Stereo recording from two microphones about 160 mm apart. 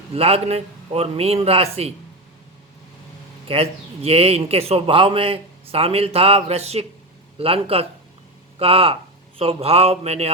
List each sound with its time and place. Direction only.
0.1 s a man's voice: 40° right (ahead or behind)
3.5 s a man's voice: 40° right (ahead or behind)